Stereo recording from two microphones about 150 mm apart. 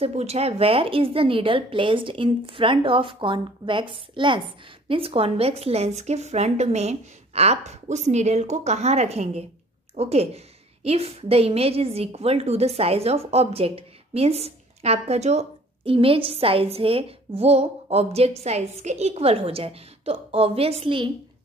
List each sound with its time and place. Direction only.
0.0 s a woman's voice: 45° right (ahead or behind)